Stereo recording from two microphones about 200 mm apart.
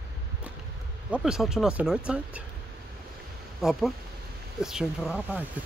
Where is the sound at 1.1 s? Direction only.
5° right (ahead or behind).